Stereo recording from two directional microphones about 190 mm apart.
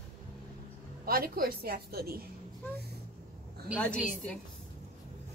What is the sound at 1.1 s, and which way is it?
A woman's voice, 50° right (ahead or behind).